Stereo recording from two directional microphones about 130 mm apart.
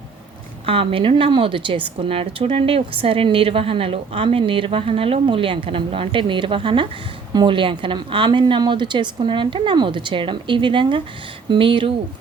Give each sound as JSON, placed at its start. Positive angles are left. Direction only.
{"t": 0.6, "sound": "a woman's voice", "side_deg": -45}